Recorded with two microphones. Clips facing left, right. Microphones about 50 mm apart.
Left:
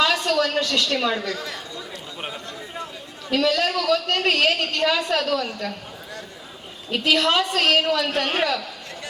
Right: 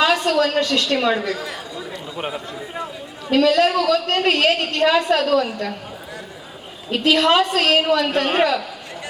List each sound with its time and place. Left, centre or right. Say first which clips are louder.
0.0 s a man's voice: right 3 dB; centre
6.9 s a woman's voice: right 4 dB; centre